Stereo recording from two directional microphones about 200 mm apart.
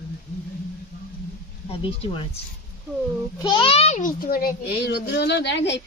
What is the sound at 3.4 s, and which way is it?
A child's voice, 25° left (ahead or behind).